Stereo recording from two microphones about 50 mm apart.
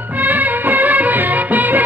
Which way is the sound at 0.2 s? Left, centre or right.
Right.